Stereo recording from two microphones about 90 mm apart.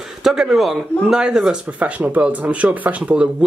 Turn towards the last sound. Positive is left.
turn(degrees=-15)  # may be behind; listen again after turning